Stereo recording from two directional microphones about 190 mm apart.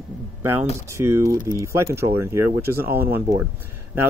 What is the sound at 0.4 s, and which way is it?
Speech, 10° right (ahead or behind).